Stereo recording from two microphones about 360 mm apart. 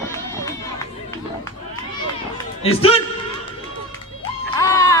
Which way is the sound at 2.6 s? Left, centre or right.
Centre.